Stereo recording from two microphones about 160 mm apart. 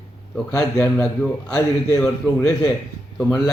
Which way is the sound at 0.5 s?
20° left (ahead or behind).